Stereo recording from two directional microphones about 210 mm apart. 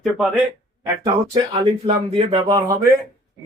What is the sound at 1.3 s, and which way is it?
Speech, 30° right (ahead or behind).